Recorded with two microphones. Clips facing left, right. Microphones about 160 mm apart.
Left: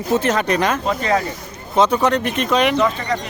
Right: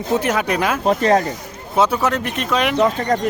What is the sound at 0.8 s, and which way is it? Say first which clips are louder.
Speech: right 4 dB; 45° right (ahead or behind).